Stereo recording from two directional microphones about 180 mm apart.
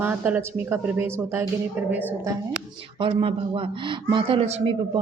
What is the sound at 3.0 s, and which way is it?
Speech, 30° right (ahead or behind).